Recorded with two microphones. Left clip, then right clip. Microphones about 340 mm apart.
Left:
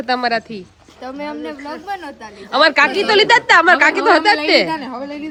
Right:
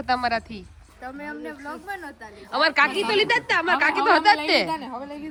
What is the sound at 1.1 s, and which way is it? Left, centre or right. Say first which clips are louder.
Speech: left 9 dB; left.